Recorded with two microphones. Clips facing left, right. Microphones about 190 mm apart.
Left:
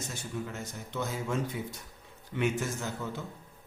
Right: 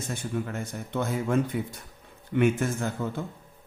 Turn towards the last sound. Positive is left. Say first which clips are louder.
# right 6 dB
turn(degrees=-55)  # may be behind; listen again after turning